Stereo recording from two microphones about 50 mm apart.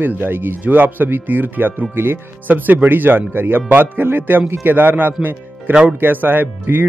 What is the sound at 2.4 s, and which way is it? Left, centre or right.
Speech, right.